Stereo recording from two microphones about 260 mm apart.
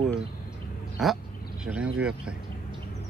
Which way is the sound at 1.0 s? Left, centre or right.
Centre.